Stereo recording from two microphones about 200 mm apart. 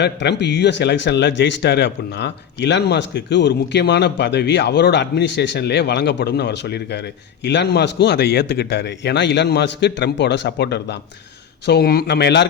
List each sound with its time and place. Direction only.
0.0 s speech: 60° left (ahead or behind)